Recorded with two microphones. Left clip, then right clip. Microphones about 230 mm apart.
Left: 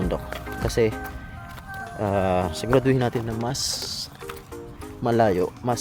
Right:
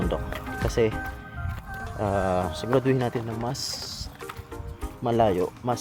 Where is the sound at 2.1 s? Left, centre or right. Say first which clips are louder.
Left 3 dB; centre.